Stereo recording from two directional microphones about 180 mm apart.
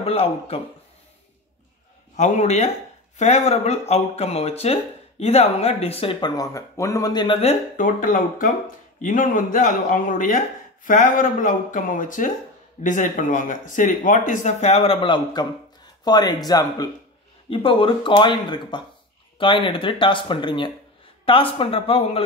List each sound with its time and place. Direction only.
0.0 s speech: 35° left (ahead or behind)
2.1 s speech: 40° left (ahead or behind)